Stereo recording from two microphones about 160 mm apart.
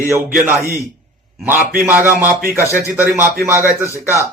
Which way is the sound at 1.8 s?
10° right (ahead or behind).